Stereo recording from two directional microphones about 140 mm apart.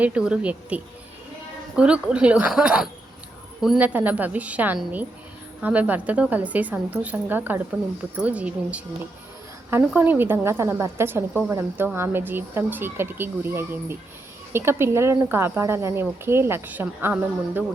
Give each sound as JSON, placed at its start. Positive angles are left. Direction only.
{"t": 0.0, "sound": "a woman's voice", "side_deg": -10}